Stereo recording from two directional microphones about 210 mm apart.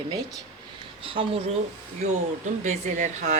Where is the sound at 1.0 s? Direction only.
25° right (ahead or behind).